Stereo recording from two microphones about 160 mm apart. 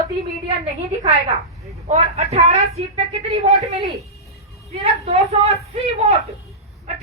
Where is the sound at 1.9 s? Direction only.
45° right (ahead or behind).